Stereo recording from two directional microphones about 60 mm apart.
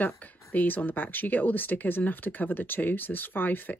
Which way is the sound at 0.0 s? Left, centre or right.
Left.